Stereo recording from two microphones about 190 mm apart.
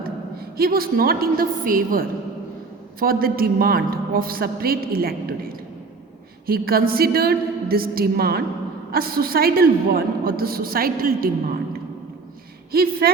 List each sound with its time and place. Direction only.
0.0 s a woman's voice: 55° right (ahead or behind)
6.4 s a woman's voice: 50° right (ahead or behind)
12.7 s a woman's voice: 50° right (ahead or behind)